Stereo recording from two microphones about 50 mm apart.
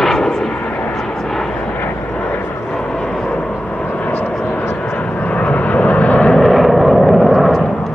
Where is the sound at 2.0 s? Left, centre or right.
Left.